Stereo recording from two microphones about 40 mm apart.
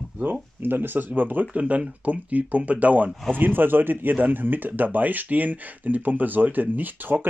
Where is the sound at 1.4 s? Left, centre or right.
Right.